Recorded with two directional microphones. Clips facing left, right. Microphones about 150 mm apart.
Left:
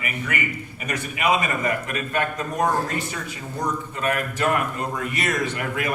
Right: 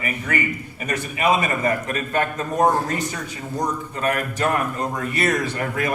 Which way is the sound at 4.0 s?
35° right (ahead or behind).